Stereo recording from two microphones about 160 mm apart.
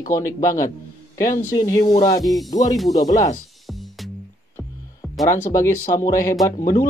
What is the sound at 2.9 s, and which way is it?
Speech, 20° left (ahead or behind).